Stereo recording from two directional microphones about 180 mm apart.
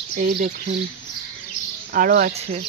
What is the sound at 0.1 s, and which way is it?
Speech, 55° right (ahead or behind).